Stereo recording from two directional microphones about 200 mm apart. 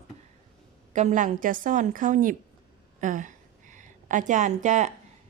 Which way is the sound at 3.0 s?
40° right (ahead or behind).